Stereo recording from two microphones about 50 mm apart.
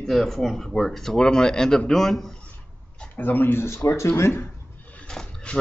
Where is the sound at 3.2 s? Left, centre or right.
Left.